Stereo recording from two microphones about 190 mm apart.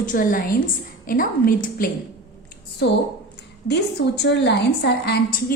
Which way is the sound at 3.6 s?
60° left (ahead or behind).